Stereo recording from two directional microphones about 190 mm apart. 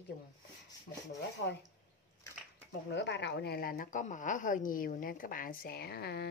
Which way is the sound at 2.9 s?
65° left (ahead or behind).